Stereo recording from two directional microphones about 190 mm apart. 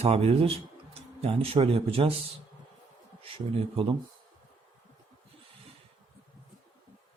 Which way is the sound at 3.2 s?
30° right (ahead or behind).